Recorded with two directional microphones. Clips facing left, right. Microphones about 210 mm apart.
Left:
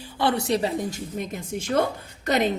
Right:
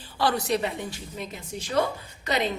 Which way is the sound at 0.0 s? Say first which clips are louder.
Left 2 dB; 20° left (ahead or behind).